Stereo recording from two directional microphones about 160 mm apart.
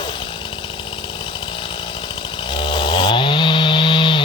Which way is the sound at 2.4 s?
30° left (ahead or behind).